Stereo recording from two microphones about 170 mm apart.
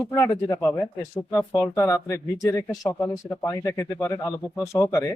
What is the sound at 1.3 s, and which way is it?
Speech, 20° left (ahead or behind).